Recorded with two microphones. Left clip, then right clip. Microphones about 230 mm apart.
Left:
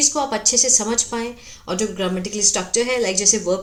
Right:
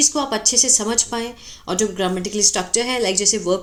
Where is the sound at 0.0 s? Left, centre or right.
Centre.